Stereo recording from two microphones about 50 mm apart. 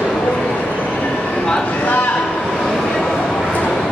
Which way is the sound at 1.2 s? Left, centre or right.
Centre.